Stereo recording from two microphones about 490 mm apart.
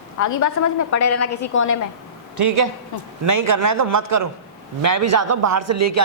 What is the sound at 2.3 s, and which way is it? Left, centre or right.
A man's voice, right.